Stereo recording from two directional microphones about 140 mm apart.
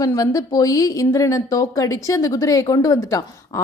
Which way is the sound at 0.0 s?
25° left (ahead or behind).